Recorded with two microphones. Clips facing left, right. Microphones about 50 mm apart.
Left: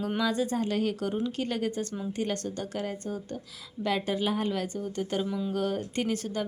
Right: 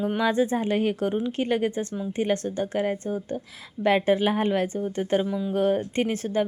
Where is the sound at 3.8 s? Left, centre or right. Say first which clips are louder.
Right 8 dB; right.